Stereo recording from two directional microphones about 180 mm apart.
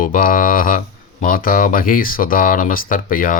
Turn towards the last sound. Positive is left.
turn(degrees=50)  # may be behind; listen again after turning